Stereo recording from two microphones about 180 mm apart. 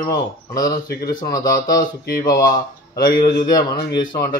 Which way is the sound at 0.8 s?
60° left (ahead or behind).